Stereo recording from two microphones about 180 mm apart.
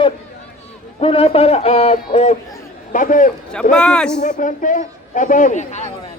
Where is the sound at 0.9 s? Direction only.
30° left (ahead or behind).